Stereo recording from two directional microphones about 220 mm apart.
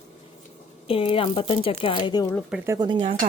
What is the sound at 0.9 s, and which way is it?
Speech, 25° left (ahead or behind).